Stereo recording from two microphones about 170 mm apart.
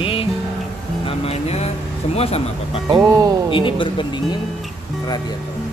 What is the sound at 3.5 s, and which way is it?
Speech, 30° left (ahead or behind).